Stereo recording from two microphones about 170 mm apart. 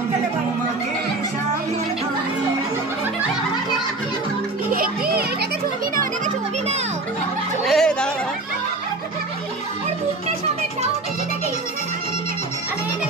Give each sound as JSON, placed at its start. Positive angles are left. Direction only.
{"t": 4.6, "sound": "music", "side_deg": -55}
{"t": 5.9, "sound": "music", "side_deg": -45}
{"t": 7.6, "sound": "a sound", "side_deg": 0}